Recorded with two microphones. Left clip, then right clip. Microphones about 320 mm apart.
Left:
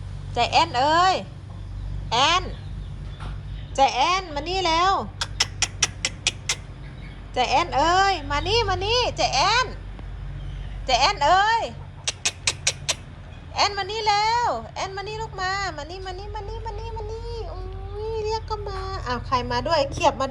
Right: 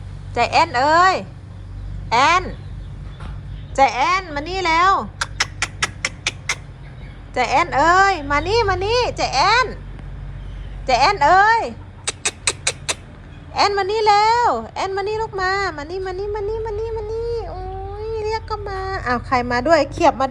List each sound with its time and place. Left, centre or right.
0.3 s a woman's voice: centre
3.8 s a woman's voice: centre
7.3 s a woman's voice: centre
10.8 s a woman's voice: centre
12.2 s a sound: centre
13.5 s a woman's voice: centre
15.6 s a woman's voice: left
16.2 s a sound: centre
18.9 s a woman's voice: centre